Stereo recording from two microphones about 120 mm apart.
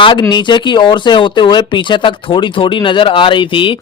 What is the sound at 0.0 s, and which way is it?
Speech, 40° left (ahead or behind).